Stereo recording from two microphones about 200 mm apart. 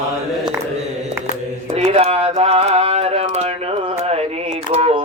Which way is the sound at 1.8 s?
30° right (ahead or behind).